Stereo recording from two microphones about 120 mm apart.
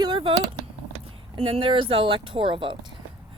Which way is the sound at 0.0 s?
45° right (ahead or behind).